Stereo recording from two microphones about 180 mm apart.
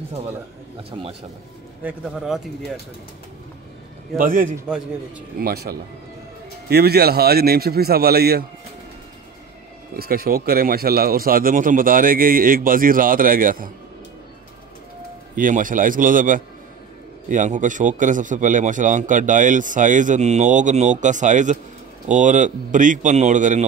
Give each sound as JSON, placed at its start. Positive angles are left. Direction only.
{"t": 0.8, "sound": "a man's voice", "side_deg": -30}
{"t": 1.8, "sound": "speech", "side_deg": -5}
{"t": 4.2, "sound": "a man's voice", "side_deg": -50}
{"t": 4.7, "sound": "speech", "side_deg": -5}
{"t": 5.4, "sound": "a man's voice", "side_deg": -60}
{"t": 9.9, "sound": "a man's voice", "side_deg": -55}
{"t": 15.3, "sound": "a man's voice", "side_deg": -50}